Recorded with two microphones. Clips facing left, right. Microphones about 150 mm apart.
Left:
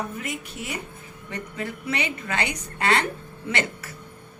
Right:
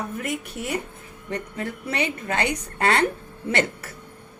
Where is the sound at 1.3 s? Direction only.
50° right (ahead or behind).